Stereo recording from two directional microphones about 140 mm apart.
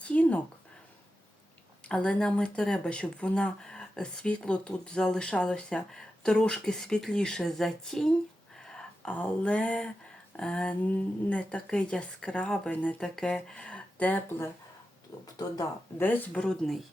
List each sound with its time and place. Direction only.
0.0 s a sound: 10° left (ahead or behind)
1.9 s speech: 5° left (ahead or behind)
15.1 s speech: 25° left (ahead or behind)
16.0 s speech: 15° left (ahead or behind)